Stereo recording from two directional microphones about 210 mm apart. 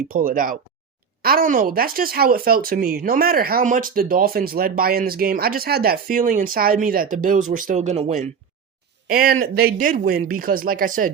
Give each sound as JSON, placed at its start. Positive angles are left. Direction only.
{"t": 0.1, "sound": "speech", "side_deg": -40}
{"t": 9.0, "sound": "speech", "side_deg": -45}